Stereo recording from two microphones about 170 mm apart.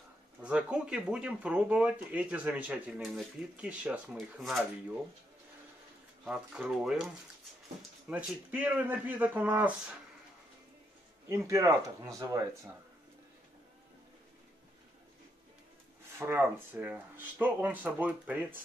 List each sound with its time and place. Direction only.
0.4 s speech: 5° right (ahead or behind)
6.2 s speech: 5° right (ahead or behind)
8.1 s speech: 10° right (ahead or behind)
11.2 s speech: 20° right (ahead or behind)
16.2 s speech: 15° right (ahead or behind)